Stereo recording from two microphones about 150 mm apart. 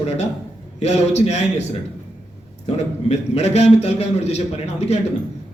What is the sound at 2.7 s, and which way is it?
A man's voice, 45° left (ahead or behind).